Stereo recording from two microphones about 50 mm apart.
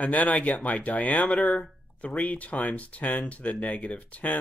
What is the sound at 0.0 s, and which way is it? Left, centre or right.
Speech, left.